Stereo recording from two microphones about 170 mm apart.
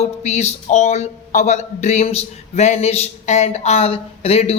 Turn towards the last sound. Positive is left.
turn(degrees=35)  # may be behind; listen again after turning